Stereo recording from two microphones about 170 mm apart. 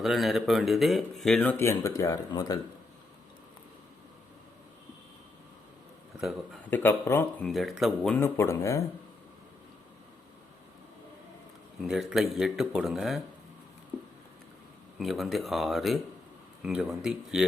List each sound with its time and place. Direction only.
0.0 s speech: centre (ahead or behind); by 2.6 s 20° left (ahead or behind)
6.1 s speech: centre (ahead or behind)
6.7 s speech: 10° left (ahead or behind)
7.5 s speech: centre (ahead or behind)
8.2 s speech: 15° left (ahead or behind)
11.8 s speech: centre (ahead or behind)
14.9 s speech: centre (ahead or behind)